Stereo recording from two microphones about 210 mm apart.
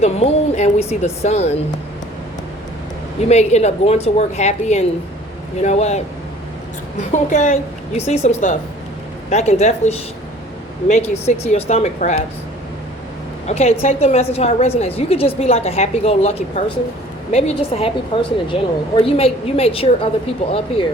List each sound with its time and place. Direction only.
0.0 s a woman's voice: 30° left (ahead or behind)
3.2 s a woman's voice: 30° left (ahead or behind)
7.1 s a woman's voice: 35° left (ahead or behind)
13.5 s a woman's voice: 30° left (ahead or behind)